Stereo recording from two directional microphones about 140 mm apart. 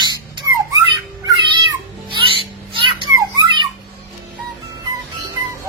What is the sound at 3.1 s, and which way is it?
Music, 30° right (ahead or behind).